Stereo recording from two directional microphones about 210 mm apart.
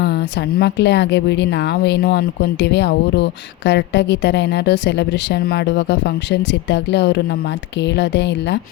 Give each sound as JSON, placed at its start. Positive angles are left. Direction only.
{"t": 0.0, "sound": "speech", "side_deg": 50}